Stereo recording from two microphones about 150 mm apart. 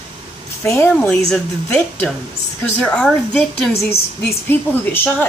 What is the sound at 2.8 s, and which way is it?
A woman's voice, 5° left (ahead or behind).